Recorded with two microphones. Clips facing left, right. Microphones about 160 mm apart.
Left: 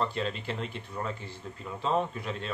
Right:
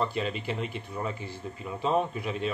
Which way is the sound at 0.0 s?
10° right (ahead or behind).